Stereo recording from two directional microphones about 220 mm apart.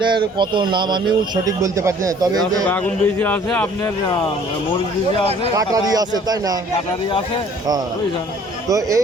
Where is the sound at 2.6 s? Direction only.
10° left (ahead or behind).